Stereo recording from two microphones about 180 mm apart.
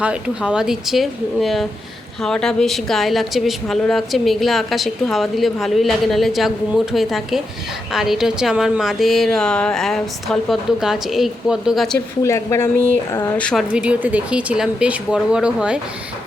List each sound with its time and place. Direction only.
0.0 s a woman's voice: 5° right (ahead or behind)
12.2 s speech: 15° left (ahead or behind)
13.3 s a woman's voice: 5° left (ahead or behind)